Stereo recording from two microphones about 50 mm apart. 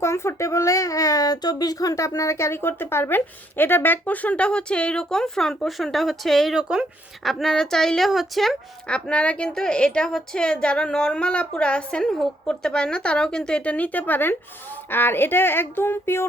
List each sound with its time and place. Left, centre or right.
0.0 s speech: left
2.0 s a woman's voice: left; by 6.5 s centre
6.5 s speech: centre
7.3 s speech: centre
8.0 s speech: centre
8.9 s a woman's voice: left
13.7 s a woman's voice: left